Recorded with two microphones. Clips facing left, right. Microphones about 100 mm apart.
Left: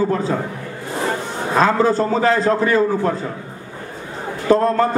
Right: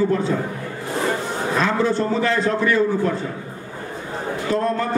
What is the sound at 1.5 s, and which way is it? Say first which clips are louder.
A man's voice: left 5 dB; 40° left (ahead or behind).